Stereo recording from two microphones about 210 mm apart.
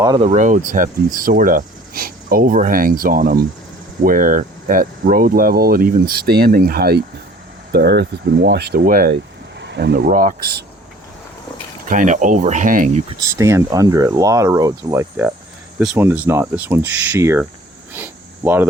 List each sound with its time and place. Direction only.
0.2 s speech: 35° right (ahead or behind)
11.9 s speech: 35° right (ahead or behind)
13.1 s speech: 15° right (ahead or behind)
17.9 s a sound: 10° right (ahead or behind)